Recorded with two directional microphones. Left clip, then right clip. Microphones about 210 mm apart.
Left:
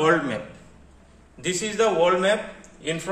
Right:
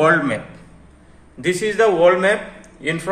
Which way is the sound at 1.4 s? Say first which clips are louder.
Right 6 dB; 40° right (ahead or behind).